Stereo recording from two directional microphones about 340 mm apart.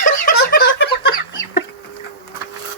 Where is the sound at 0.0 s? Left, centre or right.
Left.